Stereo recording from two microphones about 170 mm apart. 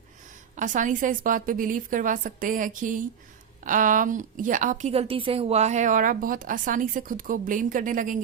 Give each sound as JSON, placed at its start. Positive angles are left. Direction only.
{"t": 0.5, "sound": "a woman's voice", "side_deg": -50}